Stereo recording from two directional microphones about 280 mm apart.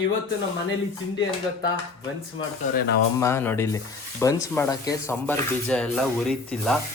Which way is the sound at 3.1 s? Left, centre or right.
Centre.